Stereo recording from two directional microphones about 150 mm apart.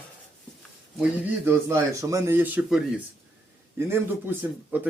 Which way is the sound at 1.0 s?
15° right (ahead or behind).